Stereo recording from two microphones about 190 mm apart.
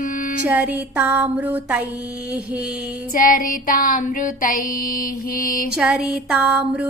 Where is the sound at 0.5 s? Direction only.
10° right (ahead or behind).